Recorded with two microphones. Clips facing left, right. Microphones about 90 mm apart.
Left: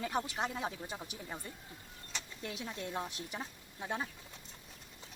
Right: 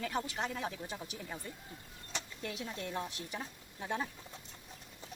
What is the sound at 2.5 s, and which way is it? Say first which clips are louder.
Speech: even; 20° left (ahead or behind).